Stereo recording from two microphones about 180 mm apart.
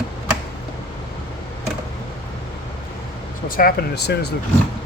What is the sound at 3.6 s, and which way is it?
Speech, 55° left (ahead or behind).